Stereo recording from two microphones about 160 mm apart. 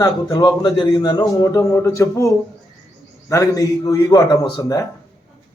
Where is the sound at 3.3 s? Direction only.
20° left (ahead or behind).